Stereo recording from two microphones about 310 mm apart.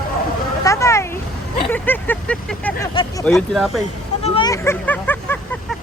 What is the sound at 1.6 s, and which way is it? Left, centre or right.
Vehicle, centre.